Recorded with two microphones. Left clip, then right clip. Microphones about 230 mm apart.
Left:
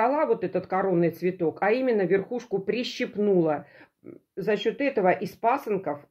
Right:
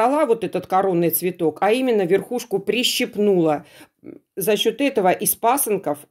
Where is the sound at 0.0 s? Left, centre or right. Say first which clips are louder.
Right 5 dB; right.